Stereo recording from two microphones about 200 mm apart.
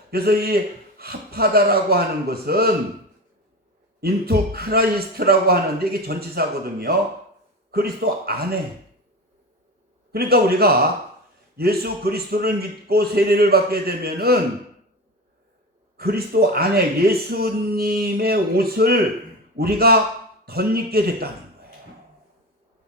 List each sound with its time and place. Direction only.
0.1 s speech: 50° right (ahead or behind)
4.0 s speech: 50° right (ahead or behind)
10.1 s speech: 50° right (ahead or behind)
16.0 s speech: 50° right (ahead or behind)